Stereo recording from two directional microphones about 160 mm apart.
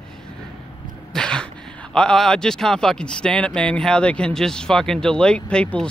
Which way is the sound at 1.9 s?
5° left (ahead or behind).